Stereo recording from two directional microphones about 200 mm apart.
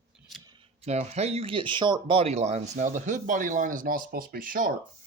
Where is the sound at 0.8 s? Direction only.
35° right (ahead or behind).